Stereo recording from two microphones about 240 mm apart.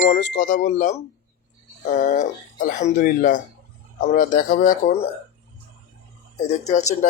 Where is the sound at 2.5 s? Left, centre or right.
Left.